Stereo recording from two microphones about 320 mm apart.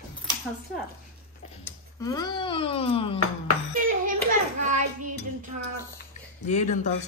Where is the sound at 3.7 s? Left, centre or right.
Right.